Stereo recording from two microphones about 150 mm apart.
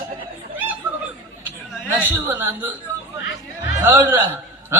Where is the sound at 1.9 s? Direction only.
15° right (ahead or behind).